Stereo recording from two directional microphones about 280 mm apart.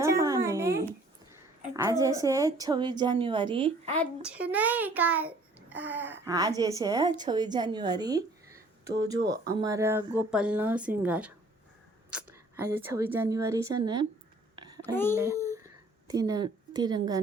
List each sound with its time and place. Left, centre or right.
0.0 s a sound: centre
1.7 s a woman's voice: centre
3.9 s a child's voice: centre
9.1 s speech: right
9.5 s a woman's voice: centre
15.5 s a sound: centre